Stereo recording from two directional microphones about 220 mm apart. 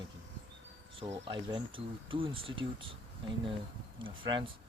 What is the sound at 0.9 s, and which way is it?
Speech, 25° right (ahead or behind).